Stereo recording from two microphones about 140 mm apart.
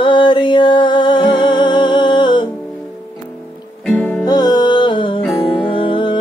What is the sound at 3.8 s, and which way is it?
Music, 10° left (ahead or behind).